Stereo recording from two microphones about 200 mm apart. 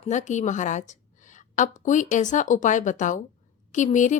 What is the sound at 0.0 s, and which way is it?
A woman's voice, 35° left (ahead or behind).